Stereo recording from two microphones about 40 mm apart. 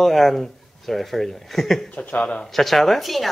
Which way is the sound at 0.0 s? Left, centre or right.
Centre.